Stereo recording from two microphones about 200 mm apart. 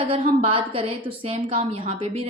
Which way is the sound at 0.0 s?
25° right (ahead or behind).